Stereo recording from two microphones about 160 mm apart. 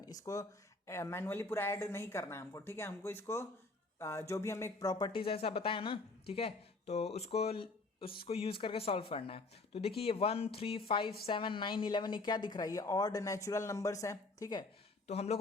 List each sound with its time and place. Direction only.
0.0 s a woman's voice: 20° left (ahead or behind)
15.0 s speech: 40° left (ahead or behind)